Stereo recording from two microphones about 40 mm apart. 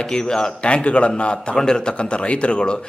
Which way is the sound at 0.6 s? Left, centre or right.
Left.